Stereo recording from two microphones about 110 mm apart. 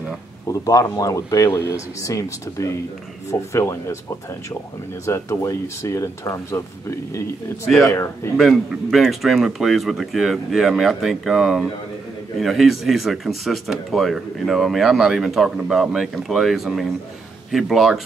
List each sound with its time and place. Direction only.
0.5 s speech: 30° left (ahead or behind)
5.0 s speech: 25° left (ahead or behind)
8.4 s speech: centre (ahead or behind)